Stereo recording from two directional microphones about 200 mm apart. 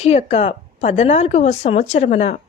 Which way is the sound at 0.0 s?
35° left (ahead or behind).